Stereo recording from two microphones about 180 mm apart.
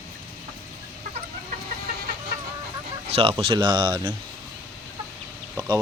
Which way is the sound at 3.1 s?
30° right (ahead or behind).